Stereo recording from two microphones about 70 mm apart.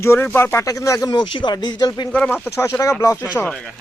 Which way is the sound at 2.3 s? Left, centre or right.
Left.